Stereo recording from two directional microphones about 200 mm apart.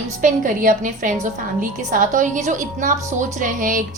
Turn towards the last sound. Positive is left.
turn(degrees=-40)  # may be behind; listen again after turning